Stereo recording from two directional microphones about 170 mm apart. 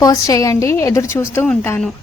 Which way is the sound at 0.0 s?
20° left (ahead or behind).